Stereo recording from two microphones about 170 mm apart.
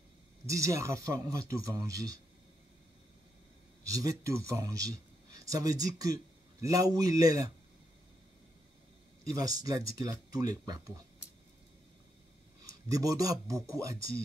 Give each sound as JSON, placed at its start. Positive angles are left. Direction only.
{"t": 0.5, "sound": "speech", "side_deg": -20}
{"t": 3.8, "sound": "speech", "side_deg": -20}
{"t": 9.2, "sound": "speech", "side_deg": -20}
{"t": 12.6, "sound": "speech", "side_deg": -20}